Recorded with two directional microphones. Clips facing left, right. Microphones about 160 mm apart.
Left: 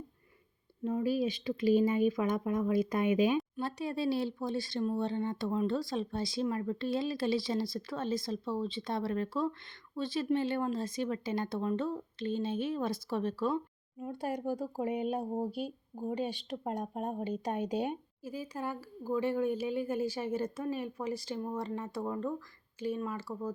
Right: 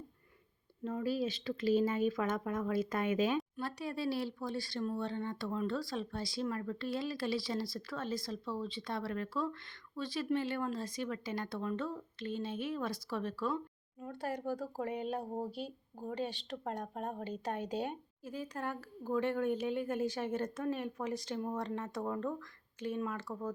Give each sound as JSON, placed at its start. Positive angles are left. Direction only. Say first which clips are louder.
{"t": 0.9, "sound": "speech", "louder": "left 4 dB", "side_deg": 15}
{"t": 14.0, "sound": "speech", "louder": "left 3 dB", "side_deg": 15}